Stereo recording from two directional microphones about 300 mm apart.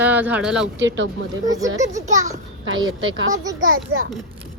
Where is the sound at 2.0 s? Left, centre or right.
Right.